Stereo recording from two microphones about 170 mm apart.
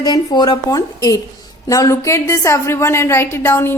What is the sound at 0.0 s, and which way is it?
A woman's voice, 25° left (ahead or behind).